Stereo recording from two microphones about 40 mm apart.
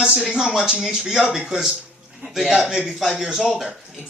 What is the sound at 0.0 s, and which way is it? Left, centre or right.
Speech, centre.